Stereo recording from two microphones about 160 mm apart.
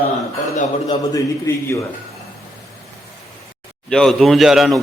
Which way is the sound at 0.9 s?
20° left (ahead or behind).